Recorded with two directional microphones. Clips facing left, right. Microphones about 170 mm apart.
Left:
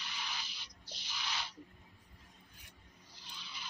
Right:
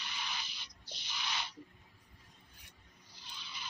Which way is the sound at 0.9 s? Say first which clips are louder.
Right 1 dB; 20° right (ahead or behind).